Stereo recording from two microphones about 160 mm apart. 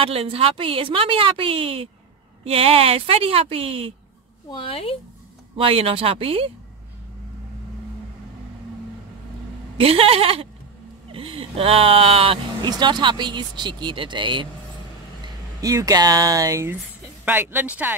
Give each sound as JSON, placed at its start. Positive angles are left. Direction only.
{"t": 0.0, "sound": "speech", "side_deg": -35}
{"t": 4.5, "sound": "speech", "side_deg": 35}
{"t": 5.6, "sound": "speech", "side_deg": -35}
{"t": 9.8, "sound": "speech", "side_deg": -35}